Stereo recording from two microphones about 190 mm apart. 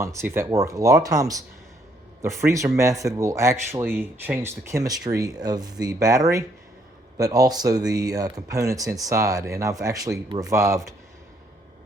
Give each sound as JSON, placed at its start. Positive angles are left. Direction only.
{"t": 0.0, "sound": "speech", "side_deg": -15}